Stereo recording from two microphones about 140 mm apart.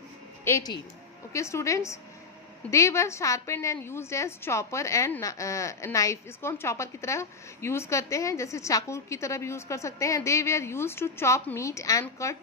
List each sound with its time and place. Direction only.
0.5 s a woman's voice: 20° left (ahead or behind)